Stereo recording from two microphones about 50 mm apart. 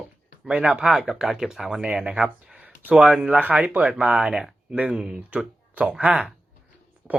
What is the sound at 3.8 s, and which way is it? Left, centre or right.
Speech, right.